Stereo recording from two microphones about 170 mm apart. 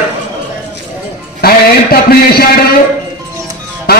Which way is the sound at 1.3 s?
65° left (ahead or behind).